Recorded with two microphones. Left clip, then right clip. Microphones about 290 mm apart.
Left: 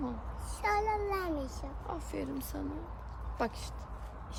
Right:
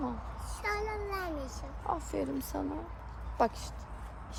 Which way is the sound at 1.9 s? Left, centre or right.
Centre.